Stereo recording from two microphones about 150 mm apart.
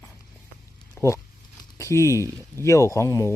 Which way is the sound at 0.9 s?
20° left (ahead or behind).